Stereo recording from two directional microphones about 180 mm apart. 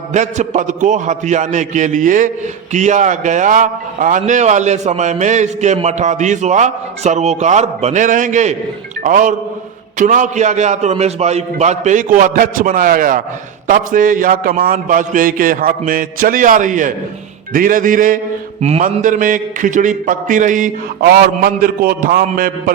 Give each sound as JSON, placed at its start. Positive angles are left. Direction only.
{"t": 0.1, "sound": "a man's voice", "side_deg": -40}